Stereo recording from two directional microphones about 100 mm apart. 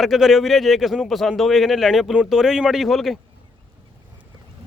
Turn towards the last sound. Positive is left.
turn(degrees=0)  # may be behind; listen again after turning